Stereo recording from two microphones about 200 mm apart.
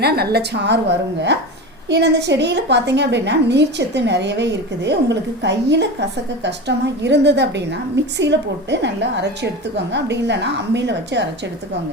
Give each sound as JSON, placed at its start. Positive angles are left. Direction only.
{"t": 0.0, "sound": "a woman's voice", "side_deg": -50}